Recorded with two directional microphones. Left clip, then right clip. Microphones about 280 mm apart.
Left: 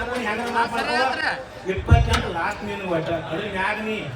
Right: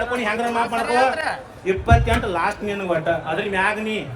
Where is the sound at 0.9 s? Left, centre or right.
Right.